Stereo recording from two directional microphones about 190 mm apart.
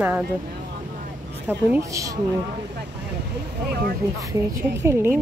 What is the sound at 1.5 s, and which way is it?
Speech, 10° right (ahead or behind).